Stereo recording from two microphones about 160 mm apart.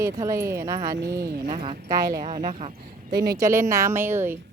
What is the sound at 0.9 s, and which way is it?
Speech, 90° right.